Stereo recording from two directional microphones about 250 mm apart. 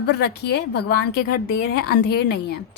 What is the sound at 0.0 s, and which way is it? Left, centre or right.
A woman's voice, left.